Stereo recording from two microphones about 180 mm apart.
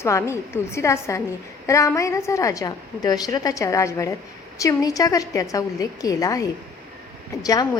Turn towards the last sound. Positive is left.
turn(degrees=20)  # may be behind; listen again after turning